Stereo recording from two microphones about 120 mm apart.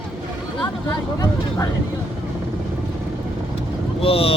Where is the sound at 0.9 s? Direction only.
30° left (ahead or behind).